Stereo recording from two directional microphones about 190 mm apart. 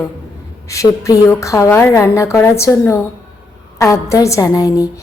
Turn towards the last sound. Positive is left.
turn(degrees=20)  # may be behind; listen again after turning